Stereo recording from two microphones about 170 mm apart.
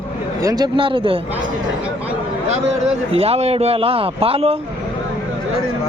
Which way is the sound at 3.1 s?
35° right (ahead or behind).